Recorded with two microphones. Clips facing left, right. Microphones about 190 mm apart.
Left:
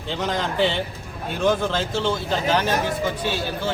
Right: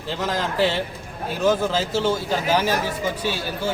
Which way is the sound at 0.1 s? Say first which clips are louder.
Even; centre (ahead or behind).